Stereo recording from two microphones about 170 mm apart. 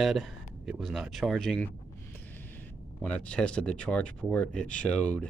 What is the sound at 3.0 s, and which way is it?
Speech, 5° left (ahead or behind).